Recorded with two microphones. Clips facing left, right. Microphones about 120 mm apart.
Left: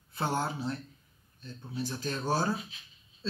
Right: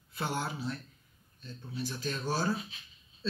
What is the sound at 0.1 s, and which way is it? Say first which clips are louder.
Speech: left 3 dB; 30° left (ahead or behind).